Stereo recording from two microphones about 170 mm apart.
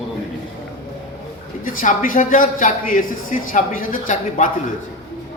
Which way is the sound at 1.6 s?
55° left (ahead or behind).